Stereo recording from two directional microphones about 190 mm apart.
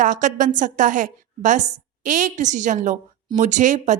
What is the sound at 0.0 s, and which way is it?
A woman's voice, 45° right (ahead or behind).